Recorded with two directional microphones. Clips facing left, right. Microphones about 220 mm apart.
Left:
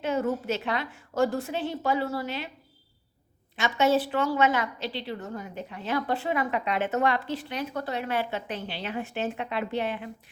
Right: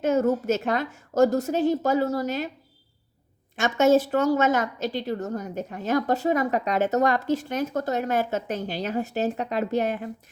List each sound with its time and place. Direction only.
0.0 s a woman's voice: 45° right (ahead or behind)
3.5 s a woman's voice: 45° right (ahead or behind)